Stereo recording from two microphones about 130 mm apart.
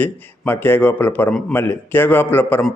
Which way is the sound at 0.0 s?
15° left (ahead or behind).